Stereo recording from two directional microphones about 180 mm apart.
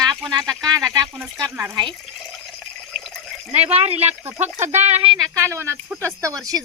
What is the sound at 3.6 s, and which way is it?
Speech, 35° right (ahead or behind).